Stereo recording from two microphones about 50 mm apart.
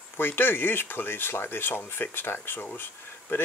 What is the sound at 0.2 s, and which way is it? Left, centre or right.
Speech, left.